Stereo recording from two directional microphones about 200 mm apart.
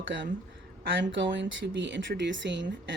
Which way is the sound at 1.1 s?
65° right (ahead or behind).